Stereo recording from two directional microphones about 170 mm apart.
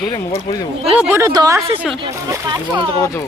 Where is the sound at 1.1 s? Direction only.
20° right (ahead or behind).